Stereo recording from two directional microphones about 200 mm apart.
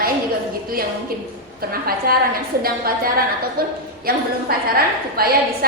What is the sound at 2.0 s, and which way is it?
A woman's voice, 50° right (ahead or behind).